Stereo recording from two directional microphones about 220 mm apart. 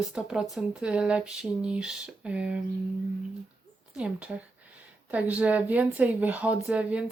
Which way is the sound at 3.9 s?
5° right (ahead or behind).